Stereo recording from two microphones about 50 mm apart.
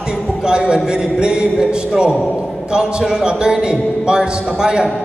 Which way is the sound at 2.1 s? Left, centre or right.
Centre.